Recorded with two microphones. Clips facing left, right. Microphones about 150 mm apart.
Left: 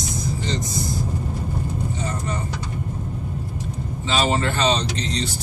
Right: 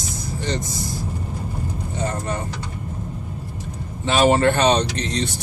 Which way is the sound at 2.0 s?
55° right (ahead or behind).